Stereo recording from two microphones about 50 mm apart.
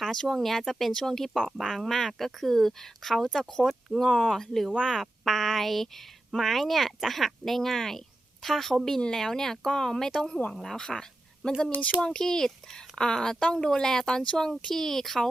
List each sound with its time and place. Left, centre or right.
0.0 s speech: centre